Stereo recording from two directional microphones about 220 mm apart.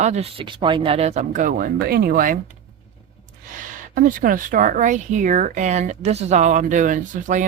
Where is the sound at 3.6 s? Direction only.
40° right (ahead or behind).